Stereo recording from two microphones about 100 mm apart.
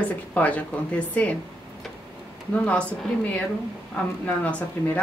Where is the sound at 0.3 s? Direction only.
15° left (ahead or behind).